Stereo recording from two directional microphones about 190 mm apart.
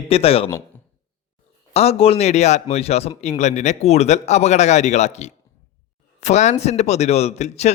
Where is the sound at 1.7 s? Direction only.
35° left (ahead or behind).